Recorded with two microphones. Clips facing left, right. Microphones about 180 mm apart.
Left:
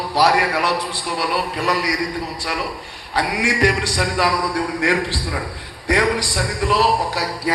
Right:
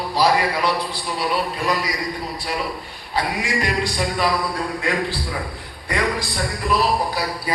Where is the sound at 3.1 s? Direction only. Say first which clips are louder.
Left 2 dB; 75° left (ahead or behind).